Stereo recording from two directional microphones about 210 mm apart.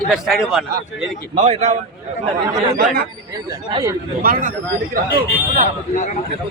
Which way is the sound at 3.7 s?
20° right (ahead or behind).